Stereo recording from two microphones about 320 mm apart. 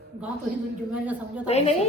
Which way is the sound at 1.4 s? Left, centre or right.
Centre.